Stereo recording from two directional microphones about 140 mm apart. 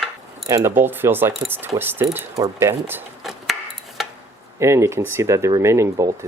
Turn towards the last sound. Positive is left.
turn(degrees=-20)  # may be behind; listen again after turning